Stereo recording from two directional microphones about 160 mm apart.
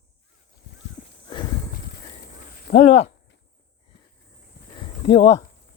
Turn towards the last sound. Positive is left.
turn(degrees=35)  # may be behind; listen again after turning